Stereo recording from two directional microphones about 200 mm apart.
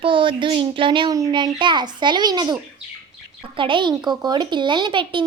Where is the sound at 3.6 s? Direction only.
25° right (ahead or behind).